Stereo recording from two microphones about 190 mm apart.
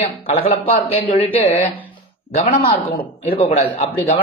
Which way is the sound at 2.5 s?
30° left (ahead or behind).